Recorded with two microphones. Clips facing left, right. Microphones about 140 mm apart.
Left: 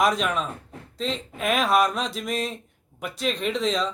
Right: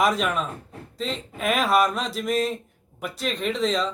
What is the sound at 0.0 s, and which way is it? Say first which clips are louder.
A man's voice: even; centre (ahead or behind).